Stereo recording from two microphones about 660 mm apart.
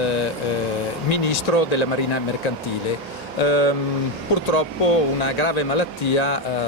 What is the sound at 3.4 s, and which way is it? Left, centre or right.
Speech, left.